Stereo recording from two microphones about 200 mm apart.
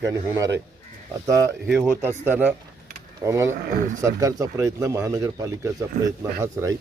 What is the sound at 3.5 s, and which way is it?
Speech, 45° right (ahead or behind).